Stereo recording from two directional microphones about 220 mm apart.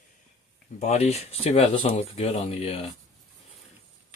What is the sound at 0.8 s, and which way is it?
Speech, 30° left (ahead or behind).